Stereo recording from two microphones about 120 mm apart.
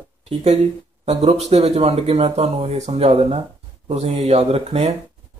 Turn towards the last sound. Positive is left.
turn(degrees=-60)  # may be behind; listen again after turning